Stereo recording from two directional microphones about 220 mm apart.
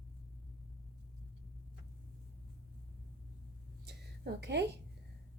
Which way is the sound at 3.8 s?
50° right (ahead or behind).